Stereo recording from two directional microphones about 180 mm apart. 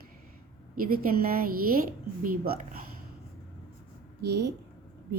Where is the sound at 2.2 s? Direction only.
50° right (ahead or behind).